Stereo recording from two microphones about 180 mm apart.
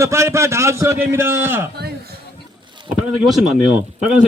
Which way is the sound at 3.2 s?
Centre (ahead or behind).